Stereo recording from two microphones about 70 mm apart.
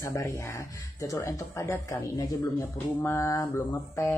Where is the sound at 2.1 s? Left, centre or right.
Left.